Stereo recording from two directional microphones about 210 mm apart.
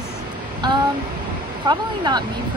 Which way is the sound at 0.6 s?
20° right (ahead or behind).